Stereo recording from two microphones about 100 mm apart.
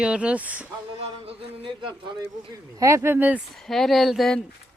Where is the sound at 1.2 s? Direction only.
55° right (ahead or behind).